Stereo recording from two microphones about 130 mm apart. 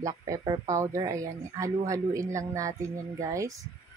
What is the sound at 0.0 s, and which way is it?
Speech, 30° right (ahead or behind).